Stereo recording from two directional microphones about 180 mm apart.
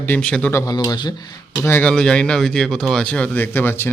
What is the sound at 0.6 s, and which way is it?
Speech, 20° left (ahead or behind).